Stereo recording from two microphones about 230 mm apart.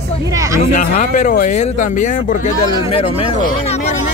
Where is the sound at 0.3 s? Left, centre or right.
Centre.